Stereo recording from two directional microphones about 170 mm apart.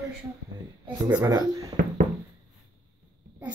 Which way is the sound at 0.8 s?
15° right (ahead or behind).